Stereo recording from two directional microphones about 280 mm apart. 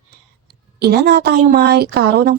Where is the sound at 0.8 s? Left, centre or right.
Right.